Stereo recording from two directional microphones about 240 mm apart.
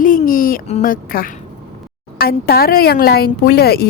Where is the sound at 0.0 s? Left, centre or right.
Left.